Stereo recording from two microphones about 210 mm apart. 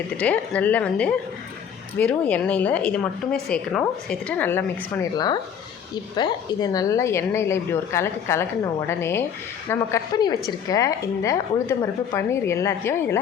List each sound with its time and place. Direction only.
0.2 s a woman's voice: 5° left (ahead or behind)
5.1 s speech: 20° left (ahead or behind)